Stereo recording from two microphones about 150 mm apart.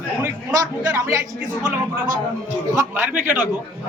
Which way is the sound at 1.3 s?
5° right (ahead or behind).